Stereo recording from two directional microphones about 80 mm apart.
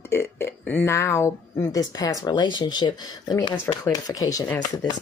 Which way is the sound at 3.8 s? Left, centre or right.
Left.